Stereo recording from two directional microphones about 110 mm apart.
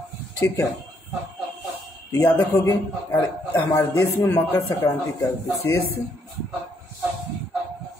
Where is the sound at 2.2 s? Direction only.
15° left (ahead or behind).